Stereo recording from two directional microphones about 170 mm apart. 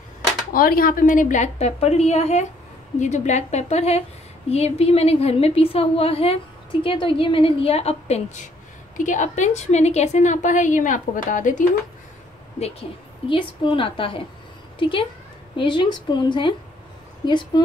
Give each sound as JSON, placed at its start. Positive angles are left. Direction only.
{"t": 0.5, "sound": "a woman's voice", "side_deg": 55}
{"t": 8.9, "sound": "a woman's voice", "side_deg": 50}
{"t": 13.3, "sound": "a woman's voice", "side_deg": 30}